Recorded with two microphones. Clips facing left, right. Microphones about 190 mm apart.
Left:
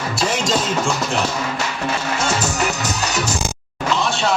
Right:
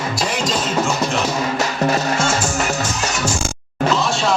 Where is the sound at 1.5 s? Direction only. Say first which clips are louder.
Right 5 dB; 40° right (ahead or behind).